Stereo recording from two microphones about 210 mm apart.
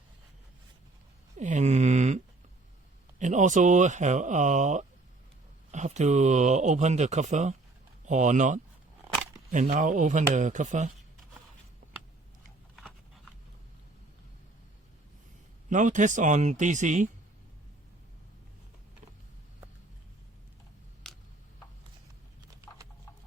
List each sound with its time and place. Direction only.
1.4 s a sound: 35° right (ahead or behind)
3.2 s speech: 35° right (ahead or behind)
15.7 s speech: 35° right (ahead or behind)